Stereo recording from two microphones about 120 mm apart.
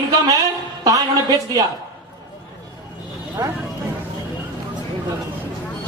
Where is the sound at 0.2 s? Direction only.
30° right (ahead or behind).